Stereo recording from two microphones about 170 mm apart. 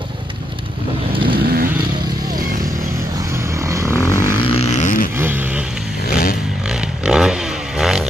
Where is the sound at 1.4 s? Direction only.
60° right (ahead or behind).